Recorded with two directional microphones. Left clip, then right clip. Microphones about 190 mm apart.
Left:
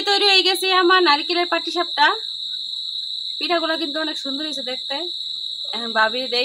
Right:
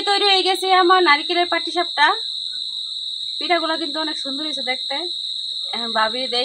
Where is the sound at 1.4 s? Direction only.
25° left (ahead or behind).